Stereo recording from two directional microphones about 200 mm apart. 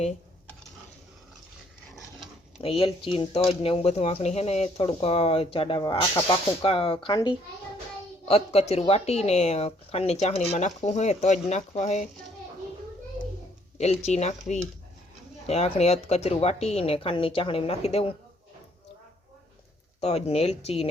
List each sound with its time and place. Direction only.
2.6 s speech: 30° left (ahead or behind)
13.7 s speech: 35° left (ahead or behind)
20.0 s speech: 30° left (ahead or behind)